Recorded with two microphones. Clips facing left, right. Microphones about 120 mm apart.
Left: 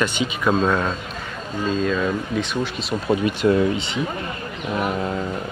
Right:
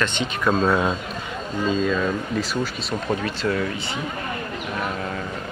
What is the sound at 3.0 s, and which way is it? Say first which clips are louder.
Speech: left 7 dB; 15° left (ahead or behind).